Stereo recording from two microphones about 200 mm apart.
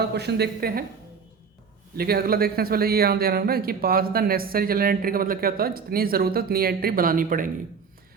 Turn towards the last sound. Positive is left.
turn(degrees=-45)  # may be behind; listen again after turning